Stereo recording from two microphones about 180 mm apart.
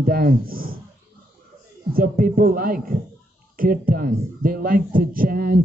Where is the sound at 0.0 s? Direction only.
55° right (ahead or behind).